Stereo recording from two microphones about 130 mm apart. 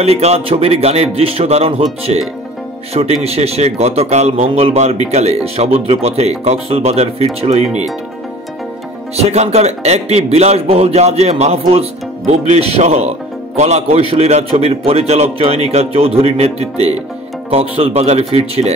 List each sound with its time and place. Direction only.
0.0 s speech: 55° right (ahead or behind)
4.5 s speech: 50° right (ahead or behind)
9.1 s speech: 55° right (ahead or behind)